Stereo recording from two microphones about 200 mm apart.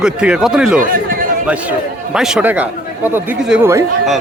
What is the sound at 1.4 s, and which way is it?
A man's voice, 5° right (ahead or behind).